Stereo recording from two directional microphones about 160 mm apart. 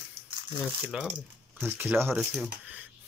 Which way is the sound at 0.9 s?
5° right (ahead or behind).